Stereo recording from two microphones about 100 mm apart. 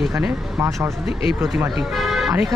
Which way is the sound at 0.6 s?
25° right (ahead or behind).